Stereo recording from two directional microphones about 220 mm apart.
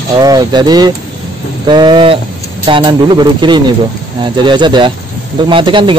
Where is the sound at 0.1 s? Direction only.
15° right (ahead or behind).